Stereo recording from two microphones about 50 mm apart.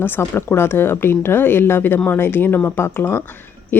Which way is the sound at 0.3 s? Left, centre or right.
Left.